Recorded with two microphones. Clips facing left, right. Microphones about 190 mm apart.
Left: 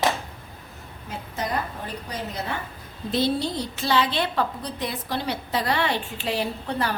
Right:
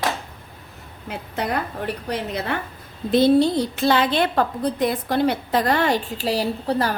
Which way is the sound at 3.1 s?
50° right (ahead or behind).